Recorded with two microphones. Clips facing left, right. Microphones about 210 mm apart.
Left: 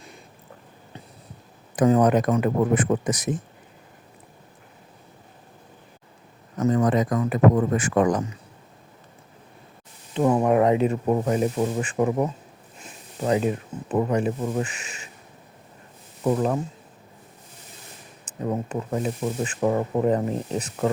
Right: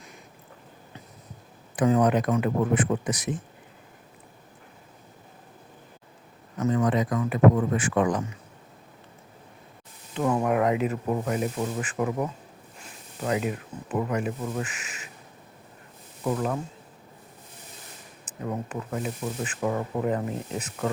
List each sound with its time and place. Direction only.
1.7 s a man's voice: 40° left (ahead or behind)
6.6 s a man's voice: 40° left (ahead or behind)
10.2 s speech: 25° left (ahead or behind)
16.2 s speech: 30° left (ahead or behind)
18.4 s speech: 30° left (ahead or behind)